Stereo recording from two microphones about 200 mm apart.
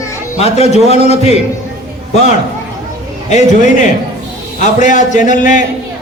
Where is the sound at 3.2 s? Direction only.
35° left (ahead or behind).